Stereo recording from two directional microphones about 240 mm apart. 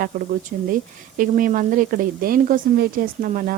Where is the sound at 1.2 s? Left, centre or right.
Right.